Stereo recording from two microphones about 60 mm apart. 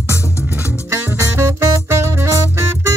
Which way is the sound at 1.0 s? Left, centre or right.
Right.